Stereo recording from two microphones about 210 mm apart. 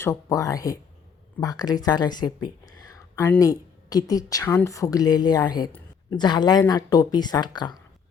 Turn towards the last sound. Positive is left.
turn(degrees=20)  # may be behind; listen again after turning